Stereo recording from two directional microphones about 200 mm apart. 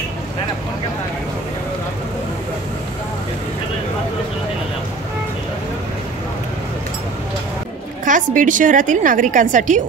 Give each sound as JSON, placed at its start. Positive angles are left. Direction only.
{"t": 8.0, "sound": "a woman's voice", "side_deg": -40}